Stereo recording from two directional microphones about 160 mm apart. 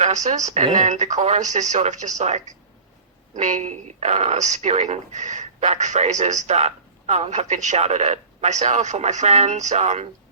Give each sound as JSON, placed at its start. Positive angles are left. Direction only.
{"t": 0.0, "sound": "speech", "side_deg": -45}